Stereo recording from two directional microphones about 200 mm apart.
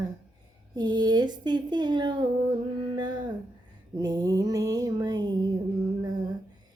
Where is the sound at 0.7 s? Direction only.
20° right (ahead or behind).